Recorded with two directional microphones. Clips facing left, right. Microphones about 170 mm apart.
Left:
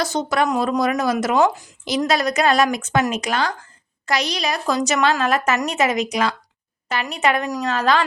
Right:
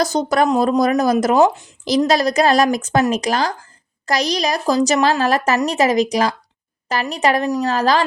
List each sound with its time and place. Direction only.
0.0 s a woman's voice: 40° right (ahead or behind)
1.4 s speech: 25° right (ahead or behind)
2.0 s a woman's voice: 35° right (ahead or behind)